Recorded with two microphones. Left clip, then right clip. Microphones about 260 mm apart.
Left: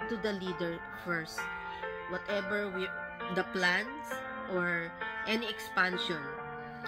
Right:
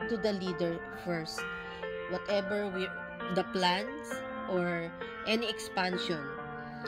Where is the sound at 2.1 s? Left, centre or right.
Left.